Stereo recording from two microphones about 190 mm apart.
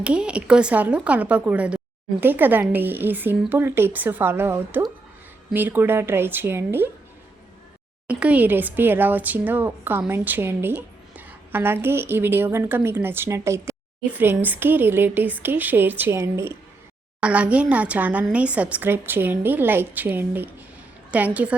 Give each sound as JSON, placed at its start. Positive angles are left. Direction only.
{"t": 0.0, "sound": "speech", "side_deg": -5}
{"t": 8.0, "sound": "a woman's voice", "side_deg": -10}